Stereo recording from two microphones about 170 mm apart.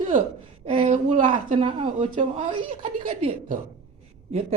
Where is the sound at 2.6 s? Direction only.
30° right (ahead or behind).